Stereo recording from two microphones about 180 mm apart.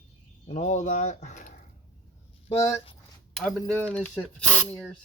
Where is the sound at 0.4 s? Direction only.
40° left (ahead or behind).